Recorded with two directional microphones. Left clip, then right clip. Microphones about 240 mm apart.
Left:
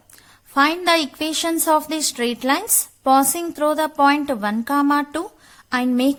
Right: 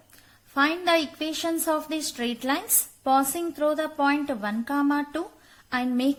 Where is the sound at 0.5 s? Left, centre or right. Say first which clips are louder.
Left 6 dB; left.